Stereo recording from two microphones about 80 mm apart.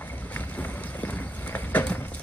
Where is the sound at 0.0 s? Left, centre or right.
Left.